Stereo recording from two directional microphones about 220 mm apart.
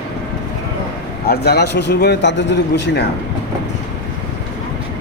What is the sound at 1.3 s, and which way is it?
A man's voice, 45° left (ahead or behind).